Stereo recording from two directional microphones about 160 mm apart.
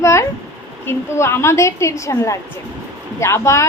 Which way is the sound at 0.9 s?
15° left (ahead or behind).